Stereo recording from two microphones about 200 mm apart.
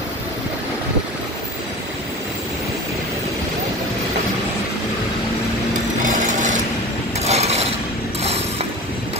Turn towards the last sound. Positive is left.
turn(degrees=-35)  # may be behind; listen again after turning